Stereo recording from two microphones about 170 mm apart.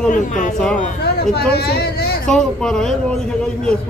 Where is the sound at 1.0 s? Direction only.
70° left (ahead or behind).